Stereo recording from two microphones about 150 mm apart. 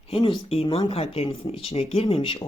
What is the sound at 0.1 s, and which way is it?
Speech, 40° left (ahead or behind).